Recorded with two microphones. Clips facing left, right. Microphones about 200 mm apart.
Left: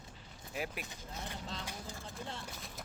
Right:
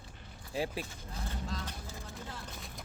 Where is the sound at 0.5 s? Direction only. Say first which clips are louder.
Right 5 dB; 30° right (ahead or behind).